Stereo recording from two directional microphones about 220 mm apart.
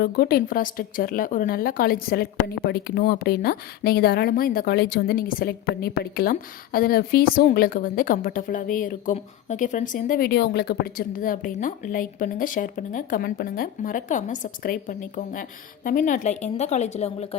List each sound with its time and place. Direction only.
0.0 s a woman's voice: 45° left (ahead or behind)